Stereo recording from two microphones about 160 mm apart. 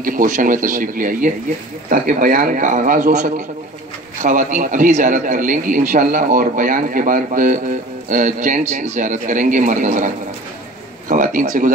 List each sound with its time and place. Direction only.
0.0 s a man's voice: 60° right (ahead or behind)